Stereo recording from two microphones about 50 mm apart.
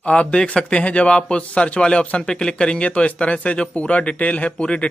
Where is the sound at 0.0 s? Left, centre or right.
Left.